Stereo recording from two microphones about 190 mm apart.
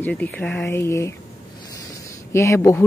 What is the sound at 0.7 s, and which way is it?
Speech, 15° left (ahead or behind).